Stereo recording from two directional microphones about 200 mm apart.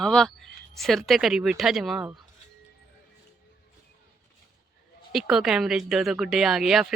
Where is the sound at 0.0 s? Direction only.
5° left (ahead or behind).